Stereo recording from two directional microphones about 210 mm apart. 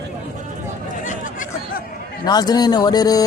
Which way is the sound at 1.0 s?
40° left (ahead or behind).